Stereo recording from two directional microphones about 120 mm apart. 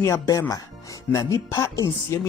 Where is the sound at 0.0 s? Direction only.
25° left (ahead or behind).